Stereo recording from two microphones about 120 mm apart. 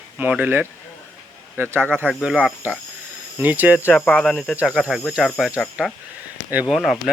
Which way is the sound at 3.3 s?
15° right (ahead or behind).